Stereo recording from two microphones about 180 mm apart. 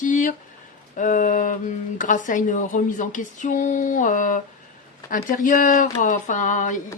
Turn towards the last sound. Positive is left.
turn(degrees=45)  # may be behind; listen again after turning